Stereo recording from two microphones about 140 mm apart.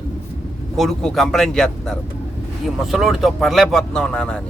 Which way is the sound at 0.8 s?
Centre (ahead or behind).